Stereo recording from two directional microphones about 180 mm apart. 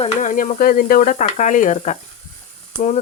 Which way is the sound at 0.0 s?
45° left (ahead or behind).